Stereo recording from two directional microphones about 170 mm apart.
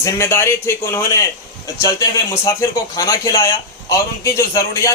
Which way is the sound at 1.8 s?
15° left (ahead or behind).